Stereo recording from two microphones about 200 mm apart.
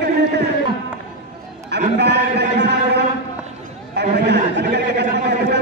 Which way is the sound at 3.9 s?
60° right (ahead or behind).